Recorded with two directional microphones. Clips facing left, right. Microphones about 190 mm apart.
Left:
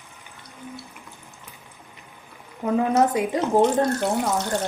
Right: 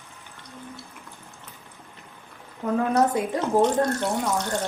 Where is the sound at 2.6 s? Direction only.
10° left (ahead or behind).